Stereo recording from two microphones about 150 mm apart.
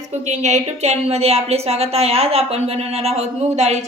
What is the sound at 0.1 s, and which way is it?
A woman's voice, 50° right (ahead or behind).